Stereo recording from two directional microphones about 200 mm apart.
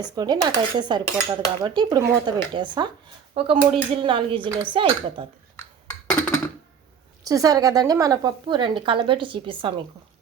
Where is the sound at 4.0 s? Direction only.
25° right (ahead or behind).